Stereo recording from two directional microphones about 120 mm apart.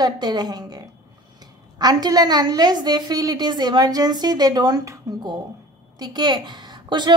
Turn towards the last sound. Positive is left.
turn(degrees=-40)  # may be behind; listen again after turning